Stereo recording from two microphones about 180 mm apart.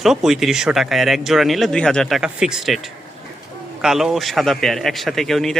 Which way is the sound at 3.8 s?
Centre (ahead or behind).